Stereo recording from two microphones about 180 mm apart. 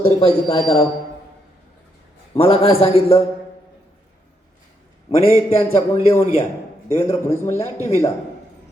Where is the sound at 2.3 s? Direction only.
30° left (ahead or behind).